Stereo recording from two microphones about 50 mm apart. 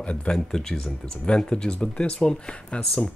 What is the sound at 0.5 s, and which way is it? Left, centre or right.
Speech, centre.